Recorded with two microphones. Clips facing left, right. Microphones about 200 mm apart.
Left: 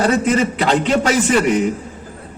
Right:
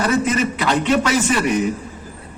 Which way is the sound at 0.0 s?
30° left (ahead or behind).